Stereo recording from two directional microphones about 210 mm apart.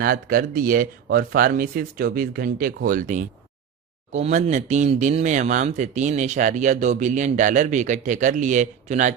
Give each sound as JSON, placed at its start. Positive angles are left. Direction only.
{"t": 0.0, "sound": "speech", "side_deg": -40}